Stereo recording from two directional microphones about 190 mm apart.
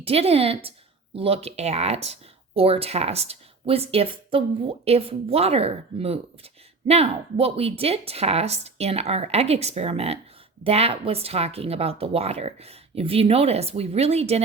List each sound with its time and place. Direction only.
0.0 s speech: 30° right (ahead or behind)